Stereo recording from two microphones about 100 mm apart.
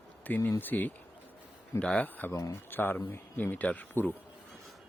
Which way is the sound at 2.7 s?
20° left (ahead or behind).